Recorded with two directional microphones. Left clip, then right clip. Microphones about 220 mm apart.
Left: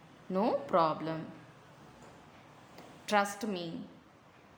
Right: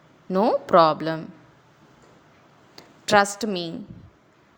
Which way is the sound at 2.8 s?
35° right (ahead or behind).